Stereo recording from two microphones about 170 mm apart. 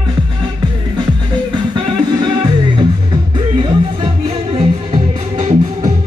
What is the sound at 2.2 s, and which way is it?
Music, 25° right (ahead or behind).